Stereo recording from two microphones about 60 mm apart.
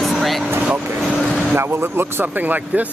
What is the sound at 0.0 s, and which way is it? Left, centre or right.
Vehicle, centre.